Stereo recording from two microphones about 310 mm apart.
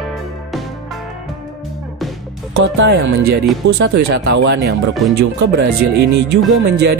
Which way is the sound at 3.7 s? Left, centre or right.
Right.